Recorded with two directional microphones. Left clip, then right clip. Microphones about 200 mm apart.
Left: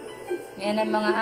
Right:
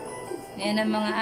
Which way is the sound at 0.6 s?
Centre (ahead or behind).